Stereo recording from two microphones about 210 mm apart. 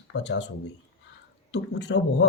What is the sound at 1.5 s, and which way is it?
Speech, 55° left (ahead or behind).